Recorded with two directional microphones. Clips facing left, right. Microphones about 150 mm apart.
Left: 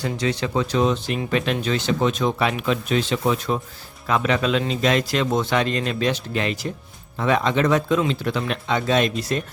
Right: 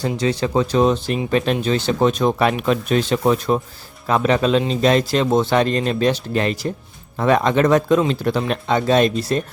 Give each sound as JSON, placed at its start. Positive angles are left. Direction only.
{"t": 0.2, "sound": "speech", "side_deg": -35}